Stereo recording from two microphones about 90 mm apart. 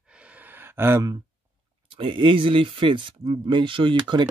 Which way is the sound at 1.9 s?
75° right (ahead or behind).